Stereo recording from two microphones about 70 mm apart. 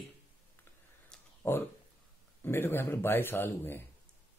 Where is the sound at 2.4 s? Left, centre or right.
Left.